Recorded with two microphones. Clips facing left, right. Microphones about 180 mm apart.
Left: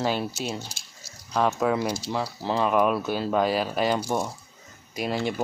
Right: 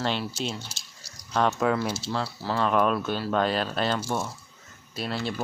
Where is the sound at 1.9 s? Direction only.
15° left (ahead or behind).